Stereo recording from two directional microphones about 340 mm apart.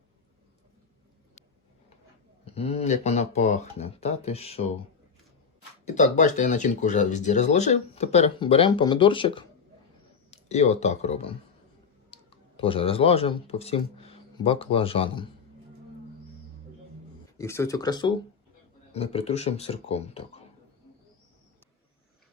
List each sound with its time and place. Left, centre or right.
2.4 s speech: centre
5.8 s speech: left
17.3 s speech: centre